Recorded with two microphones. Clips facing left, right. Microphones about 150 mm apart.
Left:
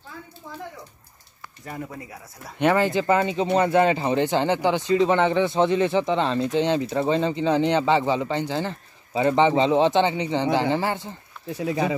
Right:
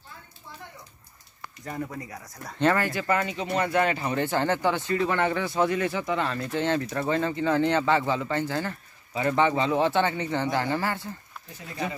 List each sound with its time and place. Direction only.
2.0 s speech: 5° left (ahead or behind)
2.7 s speech: 20° left (ahead or behind)
11.5 s speech: 90° left